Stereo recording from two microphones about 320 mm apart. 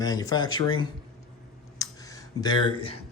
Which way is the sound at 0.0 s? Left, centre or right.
Centre.